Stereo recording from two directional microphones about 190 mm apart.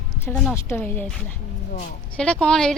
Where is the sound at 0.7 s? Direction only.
10° left (ahead or behind).